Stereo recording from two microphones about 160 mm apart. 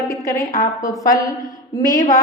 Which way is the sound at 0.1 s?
20° left (ahead or behind).